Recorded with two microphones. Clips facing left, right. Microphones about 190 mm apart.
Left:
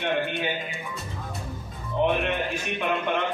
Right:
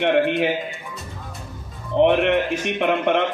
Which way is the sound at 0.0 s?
90° right.